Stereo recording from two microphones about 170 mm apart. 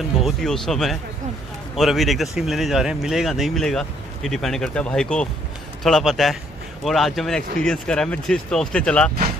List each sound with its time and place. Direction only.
0.2 s speech: centre (ahead or behind)